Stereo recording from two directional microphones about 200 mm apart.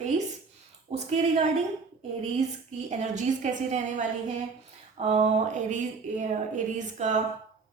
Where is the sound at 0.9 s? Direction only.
35° right (ahead or behind).